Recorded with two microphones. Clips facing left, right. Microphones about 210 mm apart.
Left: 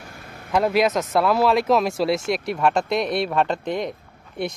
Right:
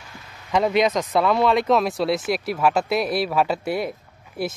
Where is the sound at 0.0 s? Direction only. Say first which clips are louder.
Left 4 dB; 50° left (ahead or behind).